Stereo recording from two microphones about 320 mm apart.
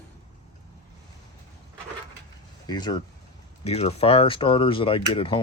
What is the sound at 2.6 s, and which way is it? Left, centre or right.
Speech, centre.